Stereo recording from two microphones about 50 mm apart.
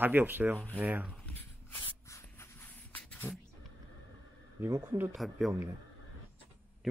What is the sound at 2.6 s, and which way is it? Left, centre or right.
Beatboxing, left.